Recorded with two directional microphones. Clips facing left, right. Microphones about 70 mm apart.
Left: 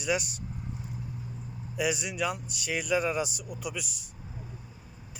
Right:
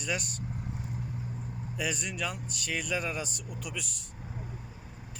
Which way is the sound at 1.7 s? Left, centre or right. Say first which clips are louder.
Left 5 dB; centre.